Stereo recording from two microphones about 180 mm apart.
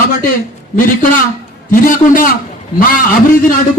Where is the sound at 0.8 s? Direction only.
50° left (ahead or behind).